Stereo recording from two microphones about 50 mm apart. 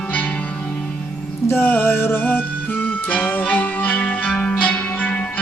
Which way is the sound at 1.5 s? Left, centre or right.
Left.